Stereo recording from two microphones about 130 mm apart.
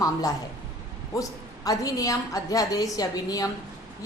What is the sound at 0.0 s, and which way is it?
A woman's voice, 25° left (ahead or behind).